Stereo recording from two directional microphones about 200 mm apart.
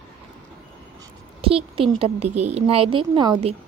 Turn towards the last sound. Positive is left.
turn(degrees=-25)  # may be behind; listen again after turning